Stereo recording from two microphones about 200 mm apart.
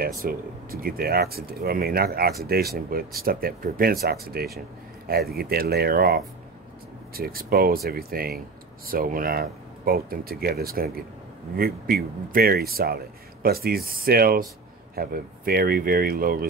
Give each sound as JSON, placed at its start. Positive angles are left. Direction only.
{"t": 0.0, "sound": "speech", "side_deg": -45}